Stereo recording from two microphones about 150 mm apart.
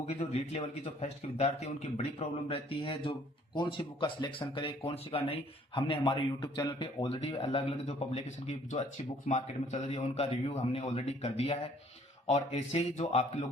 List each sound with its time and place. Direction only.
0.2 s a man's voice: 40° left (ahead or behind)